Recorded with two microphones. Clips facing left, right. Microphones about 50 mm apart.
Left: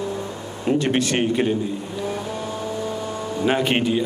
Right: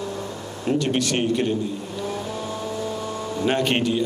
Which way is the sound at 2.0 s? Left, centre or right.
Centre.